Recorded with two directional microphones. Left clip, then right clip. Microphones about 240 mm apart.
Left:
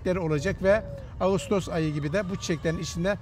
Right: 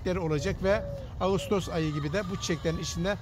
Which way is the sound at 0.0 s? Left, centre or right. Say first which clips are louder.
Left 3 dB; left.